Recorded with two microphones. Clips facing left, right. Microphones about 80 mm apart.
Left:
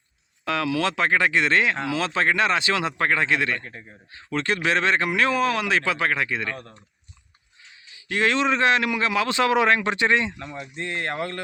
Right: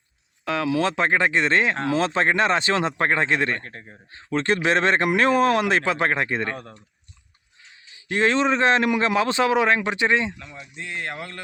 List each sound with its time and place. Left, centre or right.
0.4 s speech: centre
3.6 s speech: centre
4.1 s speech: right
7.9 s speech: right
10.3 s speech: centre